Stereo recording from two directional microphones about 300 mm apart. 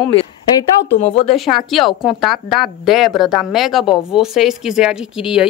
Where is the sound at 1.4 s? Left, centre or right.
Centre.